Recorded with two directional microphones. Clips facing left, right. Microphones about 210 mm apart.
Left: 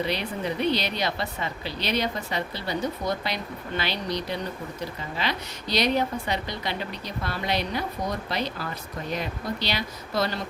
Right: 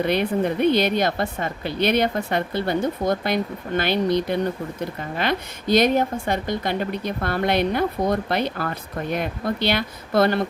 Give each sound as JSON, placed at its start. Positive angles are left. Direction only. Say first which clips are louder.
{"t": 0.0, "sound": "a woman's voice", "louder": "right 8 dB", "side_deg": -55}